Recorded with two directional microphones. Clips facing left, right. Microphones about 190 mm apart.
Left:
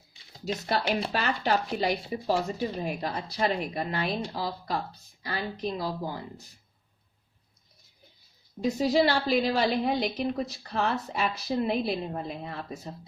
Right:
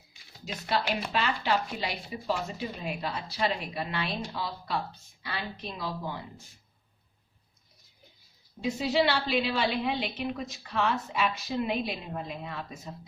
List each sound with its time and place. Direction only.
1.1 s a woman's voice: 40° left (ahead or behind)
8.6 s a woman's voice: 40° left (ahead or behind)